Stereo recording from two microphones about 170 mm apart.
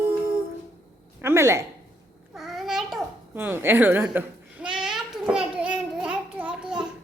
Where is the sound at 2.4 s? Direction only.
Centre (ahead or behind).